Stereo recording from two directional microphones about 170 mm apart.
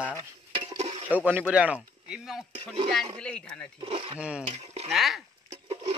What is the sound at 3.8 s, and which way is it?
Speech, 35° right (ahead or behind).